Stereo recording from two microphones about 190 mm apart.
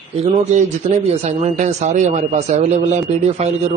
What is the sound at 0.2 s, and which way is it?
A man's voice, 35° right (ahead or behind).